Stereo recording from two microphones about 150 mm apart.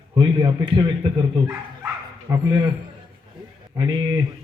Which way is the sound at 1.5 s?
20° right (ahead or behind).